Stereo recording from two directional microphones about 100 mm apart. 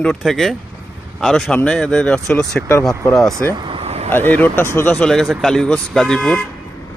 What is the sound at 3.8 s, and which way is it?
Vehicle, 90° right.